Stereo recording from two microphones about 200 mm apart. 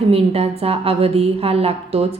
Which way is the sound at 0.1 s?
30° right (ahead or behind).